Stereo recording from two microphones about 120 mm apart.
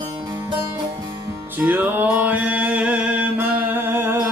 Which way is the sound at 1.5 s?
15° right (ahead or behind).